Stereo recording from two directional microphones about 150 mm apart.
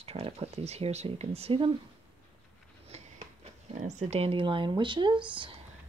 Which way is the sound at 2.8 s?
45° right (ahead or behind).